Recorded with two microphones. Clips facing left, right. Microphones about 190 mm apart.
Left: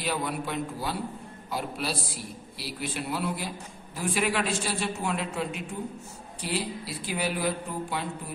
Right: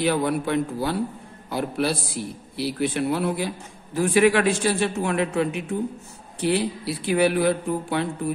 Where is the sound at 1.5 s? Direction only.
60° right (ahead or behind).